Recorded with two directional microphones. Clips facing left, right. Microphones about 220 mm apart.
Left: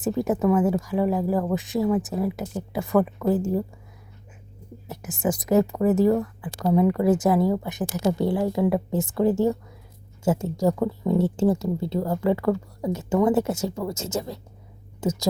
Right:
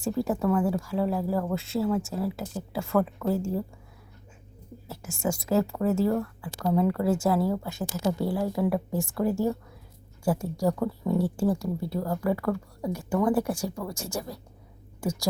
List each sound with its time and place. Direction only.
0.0 s speech: 20° left (ahead or behind)
4.9 s speech: 20° left (ahead or behind)